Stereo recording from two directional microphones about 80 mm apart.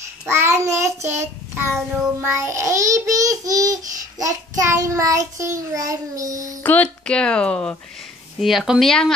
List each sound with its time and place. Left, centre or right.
0.3 s child singing: right
2.2 s babbling: right
6.6 s speech: centre
8.4 s speech: centre